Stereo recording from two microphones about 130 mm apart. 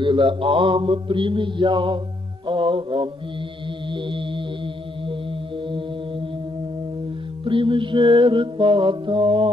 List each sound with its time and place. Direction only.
0.0 s music: 40° right (ahead or behind)
3.9 s mantra: 40° right (ahead or behind)
5.7 s music: 40° right (ahead or behind)
7.4 s music: 40° right (ahead or behind)